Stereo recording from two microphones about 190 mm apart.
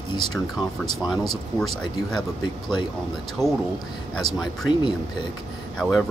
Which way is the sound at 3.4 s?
15° right (ahead or behind).